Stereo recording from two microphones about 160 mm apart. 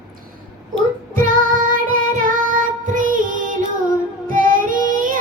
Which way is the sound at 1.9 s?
60° right (ahead or behind).